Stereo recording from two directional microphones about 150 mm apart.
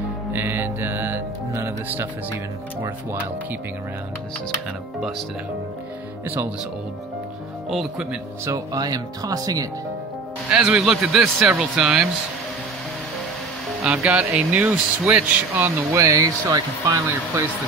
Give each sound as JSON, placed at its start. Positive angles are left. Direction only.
{"t": 0.3, "sound": "speech", "side_deg": -15}
{"t": 6.2, "sound": "speech", "side_deg": -15}
{"t": 7.7, "sound": "a man's voice", "side_deg": -5}
{"t": 8.5, "sound": "speech", "side_deg": -25}
{"t": 10.5, "sound": "a man's voice", "side_deg": -5}
{"t": 13.8, "sound": "speech", "side_deg": -5}